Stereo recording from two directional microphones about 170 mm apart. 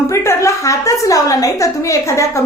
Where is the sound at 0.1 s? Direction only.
15° left (ahead or behind).